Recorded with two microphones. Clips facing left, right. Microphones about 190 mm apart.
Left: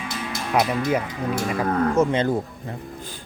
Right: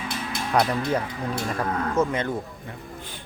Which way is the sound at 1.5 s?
10° left (ahead or behind).